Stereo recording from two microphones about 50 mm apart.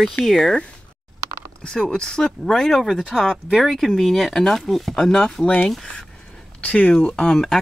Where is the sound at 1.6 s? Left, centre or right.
Centre.